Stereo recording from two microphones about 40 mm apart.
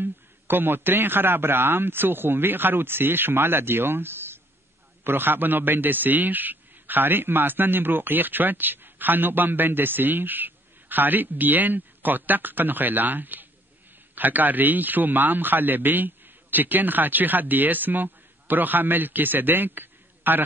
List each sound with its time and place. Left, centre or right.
0.0 s a man's voice: right
5.0 s a man's voice: right